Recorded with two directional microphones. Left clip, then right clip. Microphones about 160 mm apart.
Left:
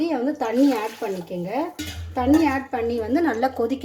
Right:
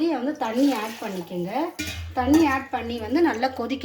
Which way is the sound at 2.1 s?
65° left (ahead or behind).